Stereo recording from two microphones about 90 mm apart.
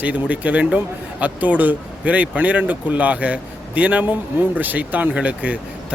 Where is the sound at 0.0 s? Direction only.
15° right (ahead or behind).